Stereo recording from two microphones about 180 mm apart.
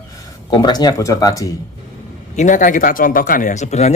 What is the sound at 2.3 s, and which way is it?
A man's voice, 45° left (ahead or behind).